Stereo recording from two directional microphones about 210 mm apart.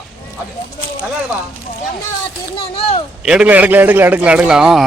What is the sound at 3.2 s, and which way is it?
A man's voice, 5° right (ahead or behind).